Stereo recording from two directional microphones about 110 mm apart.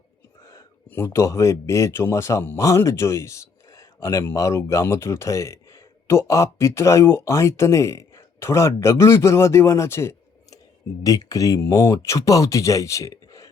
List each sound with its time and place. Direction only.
0.4 s speech: 25° left (ahead or behind)